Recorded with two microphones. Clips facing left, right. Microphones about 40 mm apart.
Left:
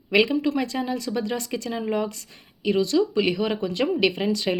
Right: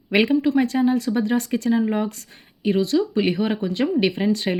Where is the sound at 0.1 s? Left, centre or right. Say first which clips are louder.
Right 2 dB; right.